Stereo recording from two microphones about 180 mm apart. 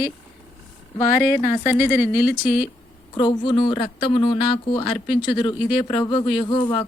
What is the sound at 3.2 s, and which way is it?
Speech, 25° left (ahead or behind).